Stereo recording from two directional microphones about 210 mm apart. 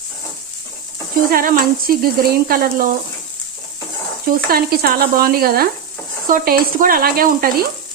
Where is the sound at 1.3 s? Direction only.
45° right (ahead or behind).